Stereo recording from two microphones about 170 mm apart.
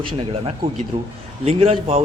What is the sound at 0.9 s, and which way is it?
A man's voice, 40° right (ahead or behind).